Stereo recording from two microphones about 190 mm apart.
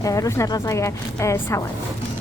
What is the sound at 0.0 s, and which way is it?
Speech, 15° left (ahead or behind).